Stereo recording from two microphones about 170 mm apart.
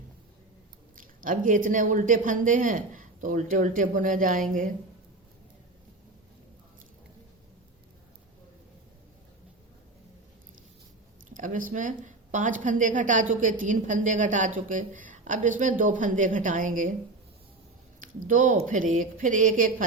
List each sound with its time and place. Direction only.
0.9 s a woman's voice: 55° right (ahead or behind)
11.3 s a woman's voice: 50° right (ahead or behind)
18.0 s a woman's voice: 50° right (ahead or behind)